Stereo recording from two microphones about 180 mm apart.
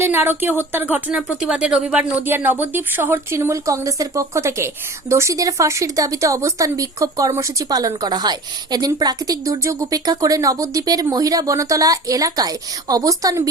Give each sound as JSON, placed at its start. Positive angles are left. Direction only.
{"t": 0.0, "sound": "speech", "side_deg": -15}